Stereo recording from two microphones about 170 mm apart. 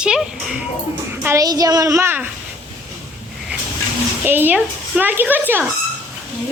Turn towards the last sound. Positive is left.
turn(degrees=-10)  # may be behind; listen again after turning